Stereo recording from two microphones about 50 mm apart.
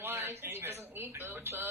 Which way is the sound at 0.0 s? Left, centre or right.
Right.